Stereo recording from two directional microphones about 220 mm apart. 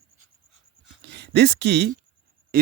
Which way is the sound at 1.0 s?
50° right (ahead or behind).